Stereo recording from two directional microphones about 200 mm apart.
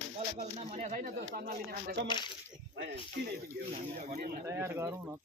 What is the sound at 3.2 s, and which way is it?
Speech, 55° right (ahead or behind).